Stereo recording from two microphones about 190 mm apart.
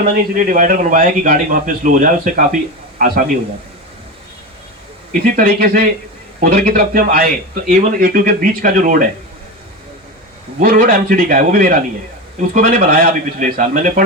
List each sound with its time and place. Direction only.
0.0 s a man's voice: 45° right (ahead or behind)
5.4 s a man's voice: 50° right (ahead or behind)
10.6 s a man's voice: 50° right (ahead or behind)